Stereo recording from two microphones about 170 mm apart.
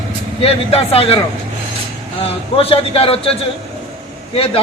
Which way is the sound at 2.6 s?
35° left (ahead or behind).